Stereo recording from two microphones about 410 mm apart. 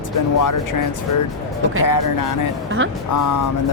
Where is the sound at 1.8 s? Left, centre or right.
Left.